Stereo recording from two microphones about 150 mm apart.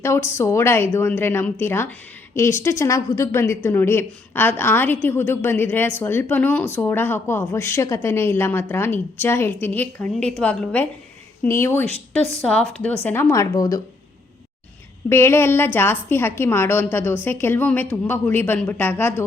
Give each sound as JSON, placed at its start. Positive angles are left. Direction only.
{"t": 0.0, "sound": "a woman's voice", "side_deg": 20}
{"t": 12.4, "sound": "a woman's voice", "side_deg": 5}
{"t": 13.3, "sound": "speech", "side_deg": 20}
{"t": 15.1, "sound": "a woman's voice", "side_deg": 15}